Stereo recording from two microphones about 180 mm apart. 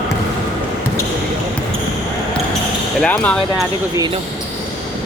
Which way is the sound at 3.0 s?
5° left (ahead or behind).